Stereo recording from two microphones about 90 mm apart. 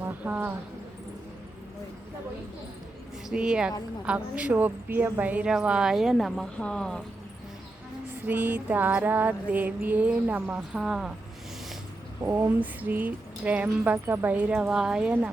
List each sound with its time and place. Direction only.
0.0 s a sound: 20° right (ahead or behind)
3.2 s a woman's voice: 10° right (ahead or behind); by 5.2 s 25° right (ahead or behind)
5.2 s a woman's voice: 15° right (ahead or behind); by 7.0 s 5° left (ahead or behind)
8.3 s speech: 20° right (ahead or behind)
10.8 s speech: 5° right (ahead or behind)
12.2 s speech: 20° right (ahead or behind)
14.6 s a woman's voice: 5° right (ahead or behind)